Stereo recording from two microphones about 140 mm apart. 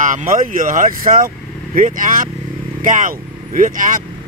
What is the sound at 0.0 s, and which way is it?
Speech, 65° right (ahead or behind).